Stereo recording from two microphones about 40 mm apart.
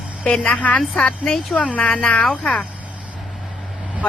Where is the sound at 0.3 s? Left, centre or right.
Left.